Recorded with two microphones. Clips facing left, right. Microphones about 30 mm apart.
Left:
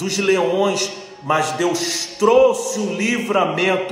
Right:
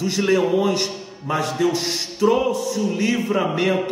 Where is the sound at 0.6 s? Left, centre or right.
Left.